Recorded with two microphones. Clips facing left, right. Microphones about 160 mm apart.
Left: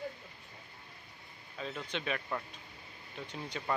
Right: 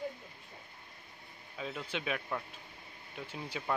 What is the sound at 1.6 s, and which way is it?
Speech, 5° right (ahead or behind).